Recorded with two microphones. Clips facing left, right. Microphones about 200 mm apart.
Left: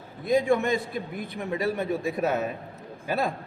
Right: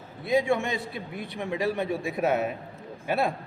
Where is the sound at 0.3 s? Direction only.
45° left (ahead or behind).